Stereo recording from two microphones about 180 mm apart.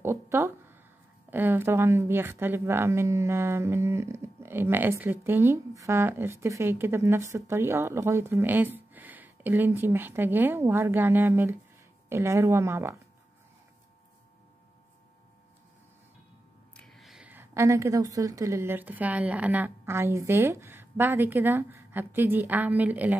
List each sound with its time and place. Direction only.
0.0 s speech: 15° right (ahead or behind)
16.7 s a woman's voice: 5° left (ahead or behind)